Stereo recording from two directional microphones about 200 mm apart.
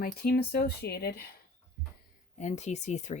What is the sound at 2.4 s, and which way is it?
Speech, 35° left (ahead or behind).